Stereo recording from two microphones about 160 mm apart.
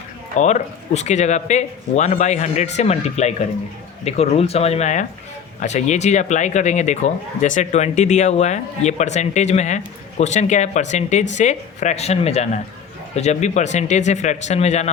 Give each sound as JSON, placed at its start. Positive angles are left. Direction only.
{"t": 0.3, "sound": "speech", "side_deg": 45}